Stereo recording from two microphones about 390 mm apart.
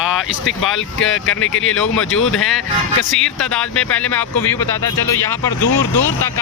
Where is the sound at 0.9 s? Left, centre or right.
Left.